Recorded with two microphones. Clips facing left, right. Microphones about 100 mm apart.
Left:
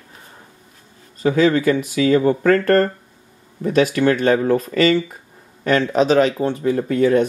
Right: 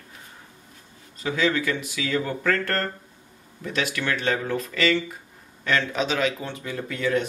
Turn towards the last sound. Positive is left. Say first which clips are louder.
# left 9 dB
turn(degrees=40)  # may be behind; listen again after turning